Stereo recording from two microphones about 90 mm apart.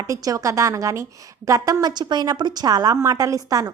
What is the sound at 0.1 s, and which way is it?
A woman's voice, 40° right (ahead or behind).